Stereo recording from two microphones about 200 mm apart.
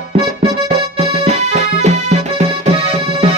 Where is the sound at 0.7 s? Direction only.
30° right (ahead or behind).